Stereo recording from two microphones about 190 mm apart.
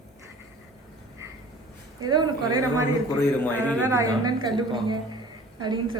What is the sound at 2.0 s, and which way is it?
Speech, 20° right (ahead or behind).